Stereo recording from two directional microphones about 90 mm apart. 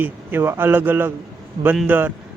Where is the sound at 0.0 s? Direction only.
20° right (ahead or behind).